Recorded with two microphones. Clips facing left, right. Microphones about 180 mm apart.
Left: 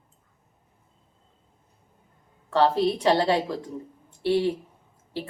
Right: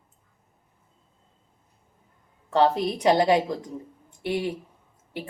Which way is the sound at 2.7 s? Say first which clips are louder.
Even; 15° right (ahead or behind).